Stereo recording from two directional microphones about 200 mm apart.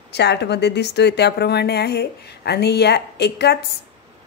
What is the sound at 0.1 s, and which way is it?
Speech, 55° left (ahead or behind).